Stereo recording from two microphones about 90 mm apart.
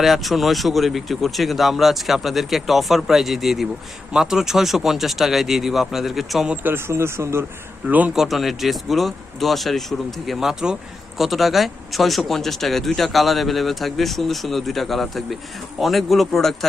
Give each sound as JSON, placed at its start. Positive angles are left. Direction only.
{"t": 0.0, "sound": "speech", "side_deg": 0}
{"t": 6.5, "sound": "speech", "side_deg": -20}
{"t": 7.9, "sound": "speech", "side_deg": -15}
{"t": 8.1, "sound": "speech", "side_deg": -5}